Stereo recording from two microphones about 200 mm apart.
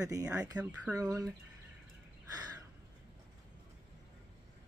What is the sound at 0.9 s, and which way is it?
Speech, 20° right (ahead or behind).